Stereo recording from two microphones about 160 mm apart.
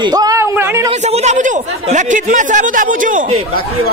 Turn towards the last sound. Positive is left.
turn(degrees=-55)  # may be behind; listen again after turning